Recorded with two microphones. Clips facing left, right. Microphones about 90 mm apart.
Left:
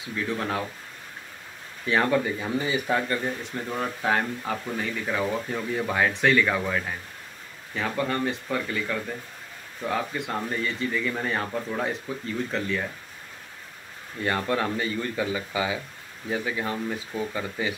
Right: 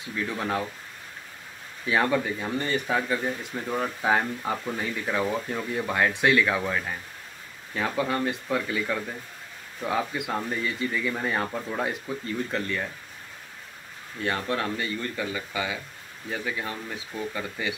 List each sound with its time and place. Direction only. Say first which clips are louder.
0.0 s speech: left 1 dB; centre (ahead or behind)
1.9 s speech: left 1 dB; centre (ahead or behind)
3.0 s speech: even; 5° right (ahead or behind)
14.2 s speech: left 2 dB; centre (ahead or behind)
14.8 s speech: left 3 dB; 15° left (ahead or behind)